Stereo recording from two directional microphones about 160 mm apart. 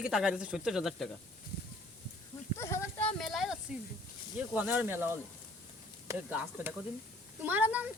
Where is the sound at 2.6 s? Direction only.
15° left (ahead or behind); by 3.5 s centre (ahead or behind).